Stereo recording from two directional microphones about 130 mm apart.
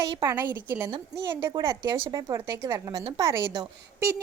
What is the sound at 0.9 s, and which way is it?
A woman's voice, 30° right (ahead or behind).